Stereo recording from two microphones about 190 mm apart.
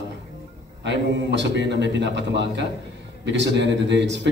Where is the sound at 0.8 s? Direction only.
70° right (ahead or behind).